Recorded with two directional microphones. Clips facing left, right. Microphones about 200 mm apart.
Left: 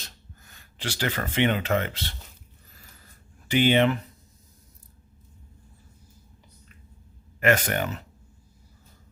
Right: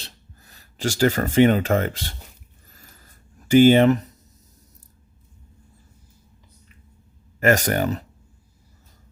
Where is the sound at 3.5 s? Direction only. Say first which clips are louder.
Right 8 dB; 45° right (ahead or behind).